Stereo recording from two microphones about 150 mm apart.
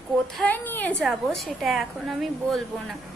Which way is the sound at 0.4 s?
15° left (ahead or behind).